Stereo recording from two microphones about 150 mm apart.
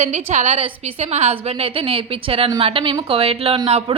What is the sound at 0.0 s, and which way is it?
A woman's voice, 50° right (ahead or behind).